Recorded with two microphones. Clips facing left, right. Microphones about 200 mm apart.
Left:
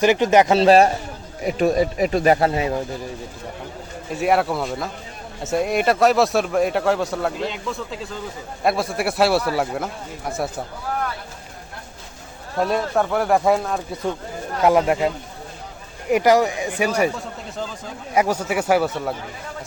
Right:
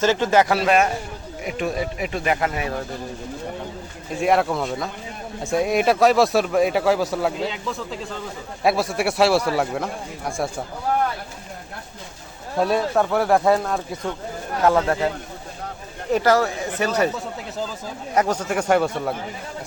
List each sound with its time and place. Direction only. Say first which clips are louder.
0.0 s speech: left 3 dB; 15° left (ahead or behind)
4.2 s a man's voice: even; 5° left (ahead or behind)
12.5 s a man's voice: right 1 dB; 5° right (ahead or behind)
14.6 s speech: left 2 dB; 15° left (ahead or behind)
18.1 s speech: left 1 dB; 10° left (ahead or behind)